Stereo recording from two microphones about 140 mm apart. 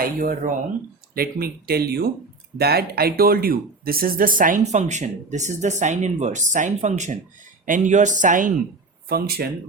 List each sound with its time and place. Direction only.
0.0 s speech: 90° right; by 7.2 s 55° right (ahead or behind)
7.6 s speech: 65° right (ahead or behind)
9.0 s speech: 90° right